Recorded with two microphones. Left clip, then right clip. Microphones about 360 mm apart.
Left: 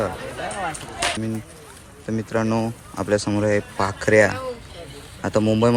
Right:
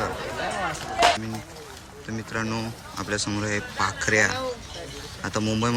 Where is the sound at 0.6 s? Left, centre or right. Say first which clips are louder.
Right 5 dB; right.